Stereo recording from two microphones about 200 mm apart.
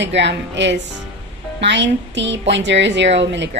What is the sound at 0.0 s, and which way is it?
A woman's voice, 60° right (ahead or behind).